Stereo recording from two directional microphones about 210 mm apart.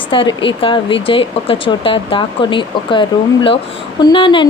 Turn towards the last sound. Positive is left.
turn(degrees=25)  # may be behind; listen again after turning